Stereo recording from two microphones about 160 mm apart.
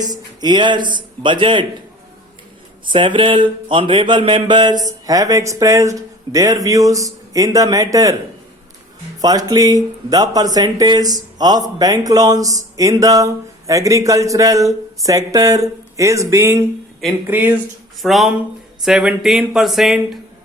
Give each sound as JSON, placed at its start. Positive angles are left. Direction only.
{"t": 0.1, "sound": "speech", "side_deg": -30}
{"t": 2.8, "sound": "speech", "side_deg": -30}
{"t": 9.2, "sound": "speech", "side_deg": -25}
{"t": 18.0, "sound": "speech", "side_deg": 0}